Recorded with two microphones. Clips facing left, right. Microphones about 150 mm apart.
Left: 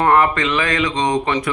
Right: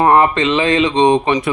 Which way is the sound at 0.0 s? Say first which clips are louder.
Right 3 dB; 25° right (ahead or behind).